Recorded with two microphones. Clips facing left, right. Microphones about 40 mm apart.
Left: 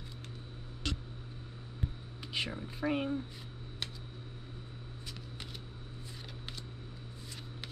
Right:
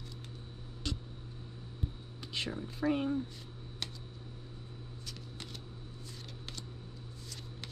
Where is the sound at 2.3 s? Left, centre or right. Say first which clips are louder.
Left 1 dB; centre.